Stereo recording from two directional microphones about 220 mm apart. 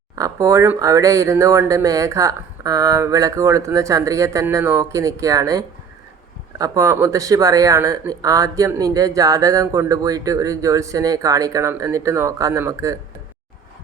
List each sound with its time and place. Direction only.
0.2 s speech: 15° right (ahead or behind)